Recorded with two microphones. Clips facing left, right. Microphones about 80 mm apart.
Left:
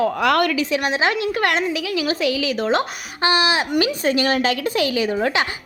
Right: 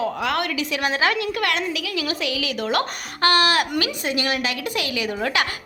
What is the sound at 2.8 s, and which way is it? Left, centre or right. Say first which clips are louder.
Speech: even; centre.